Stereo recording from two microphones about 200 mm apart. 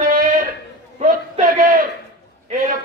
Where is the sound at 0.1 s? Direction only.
45° right (ahead or behind).